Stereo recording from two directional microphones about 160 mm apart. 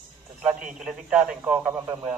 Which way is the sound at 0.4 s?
5° right (ahead or behind).